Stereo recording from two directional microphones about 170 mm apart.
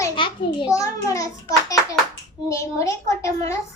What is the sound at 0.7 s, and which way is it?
A child's voice, 20° left (ahead or behind).